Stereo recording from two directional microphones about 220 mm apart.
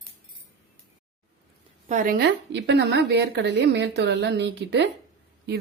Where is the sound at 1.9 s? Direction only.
35° right (ahead or behind).